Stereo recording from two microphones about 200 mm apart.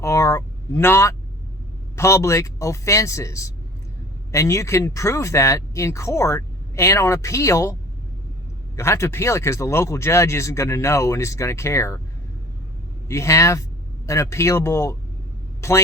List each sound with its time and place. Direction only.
0.0 s speech: 15° left (ahead or behind)
13.1 s speech: 15° left (ahead or behind)